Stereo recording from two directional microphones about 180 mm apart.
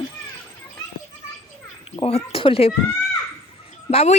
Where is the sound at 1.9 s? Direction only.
30° left (ahead or behind).